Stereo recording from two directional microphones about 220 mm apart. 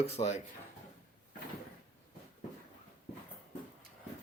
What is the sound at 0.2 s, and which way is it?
Speech, 30° left (ahead or behind).